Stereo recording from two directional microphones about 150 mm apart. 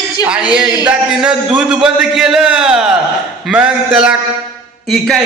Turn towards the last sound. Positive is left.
turn(degrees=-5)  # may be behind; listen again after turning